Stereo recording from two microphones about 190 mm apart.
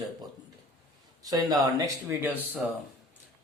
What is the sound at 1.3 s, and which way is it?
A man's voice, 20° right (ahead or behind).